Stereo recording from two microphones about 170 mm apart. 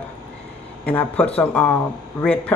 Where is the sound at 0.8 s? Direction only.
10° left (ahead or behind).